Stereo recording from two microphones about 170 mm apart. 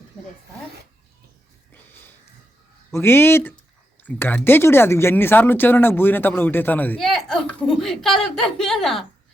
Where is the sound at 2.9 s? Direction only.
15° left (ahead or behind).